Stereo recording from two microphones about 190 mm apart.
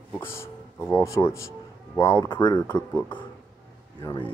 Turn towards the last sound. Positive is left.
turn(degrees=25)  # may be behind; listen again after turning